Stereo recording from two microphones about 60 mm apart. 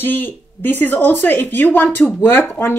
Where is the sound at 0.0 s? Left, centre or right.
Left.